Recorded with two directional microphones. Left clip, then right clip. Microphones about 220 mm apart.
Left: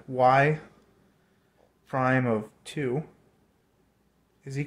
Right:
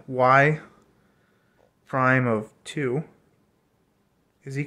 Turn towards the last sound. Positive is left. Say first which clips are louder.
# right 4 dB
turn(degrees=-15)  # may be behind; listen again after turning